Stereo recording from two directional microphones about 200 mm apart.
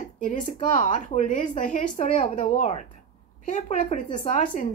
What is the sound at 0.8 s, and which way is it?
Speech, 40° left (ahead or behind).